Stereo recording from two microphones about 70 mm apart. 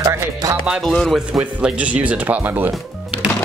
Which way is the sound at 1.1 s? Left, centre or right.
Centre.